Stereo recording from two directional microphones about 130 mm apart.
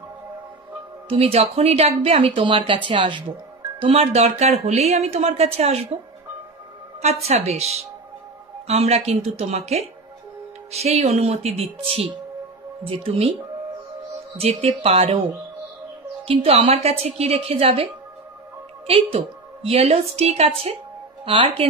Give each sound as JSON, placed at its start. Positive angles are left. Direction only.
{"t": 1.0, "sound": "speech", "side_deg": -50}
{"t": 3.8, "sound": "speech", "side_deg": -50}
{"t": 7.0, "sound": "a woman's voice", "side_deg": -55}
{"t": 14.3, "sound": "speech", "side_deg": -50}
{"t": 16.3, "sound": "speech", "side_deg": -50}
{"t": 19.1, "sound": "speech", "side_deg": -50}
{"t": 21.3, "sound": "a woman's voice", "side_deg": -40}